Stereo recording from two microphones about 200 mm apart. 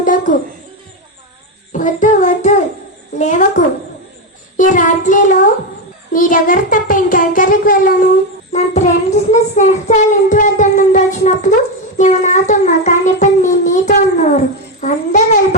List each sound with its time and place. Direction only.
0.0 s a sound: 40° left (ahead or behind)
1.7 s child singing: 40° left (ahead or behind)
6.1 s a child's voice: 45° left (ahead or behind)
8.5 s child singing: 35° left (ahead or behind)